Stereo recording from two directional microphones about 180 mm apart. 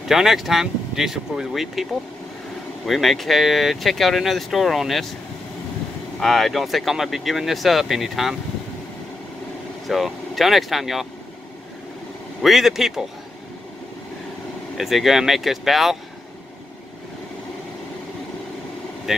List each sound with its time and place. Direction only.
0.1 s speech: centre (ahead or behind)
2.9 s speech: centre (ahead or behind)
6.1 s speech: centre (ahead or behind)
9.8 s speech: centre (ahead or behind)
12.4 s speech: centre (ahead or behind)
14.8 s speech: centre (ahead or behind)
19.1 s speech: centre (ahead or behind)